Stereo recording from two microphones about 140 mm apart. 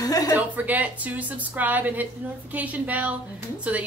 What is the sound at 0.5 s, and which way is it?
Speech, 10° right (ahead or behind).